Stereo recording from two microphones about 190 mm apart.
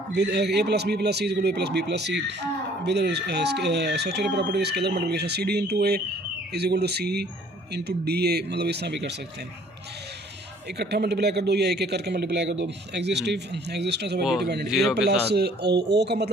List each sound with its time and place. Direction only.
0.1 s a man's voice: 60° right (ahead or behind)
10.7 s a man's voice: 60° right (ahead or behind)
14.2 s speech: centre (ahead or behind)
14.4 s a man's voice: 60° right (ahead or behind)